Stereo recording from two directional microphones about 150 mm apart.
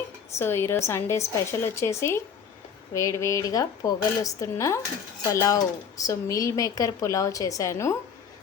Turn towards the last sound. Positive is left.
turn(degrees=20)  # may be behind; listen again after turning